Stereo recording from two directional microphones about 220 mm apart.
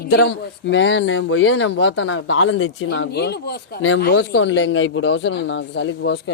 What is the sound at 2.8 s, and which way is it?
A woman's voice, 50° left (ahead or behind).